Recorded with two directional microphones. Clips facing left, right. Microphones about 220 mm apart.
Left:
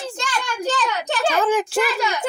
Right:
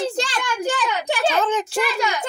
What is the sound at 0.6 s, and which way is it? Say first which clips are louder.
Speech: even; 15° right (ahead or behind).